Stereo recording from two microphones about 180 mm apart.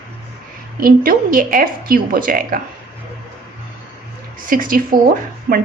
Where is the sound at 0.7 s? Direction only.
50° right (ahead or behind).